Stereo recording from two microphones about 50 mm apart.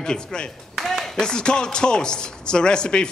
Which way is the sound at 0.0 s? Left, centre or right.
Centre.